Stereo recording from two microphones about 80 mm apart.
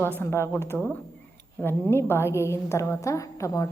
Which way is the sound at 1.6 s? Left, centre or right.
Left.